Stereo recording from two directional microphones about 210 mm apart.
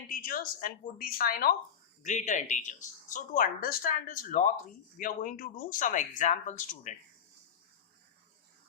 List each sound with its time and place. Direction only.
0.1 s a woman's voice: 40° left (ahead or behind)